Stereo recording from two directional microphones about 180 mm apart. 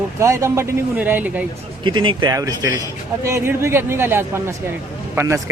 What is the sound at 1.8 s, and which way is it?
Speech, 25° right (ahead or behind).